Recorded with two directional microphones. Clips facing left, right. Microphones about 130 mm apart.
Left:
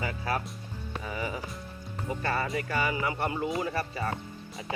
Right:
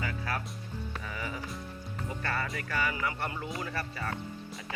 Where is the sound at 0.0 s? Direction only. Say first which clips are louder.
Left 4 dB; 20° left (ahead or behind).